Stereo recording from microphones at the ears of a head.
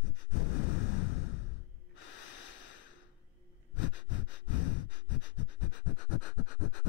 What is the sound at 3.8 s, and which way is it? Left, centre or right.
Pant, left.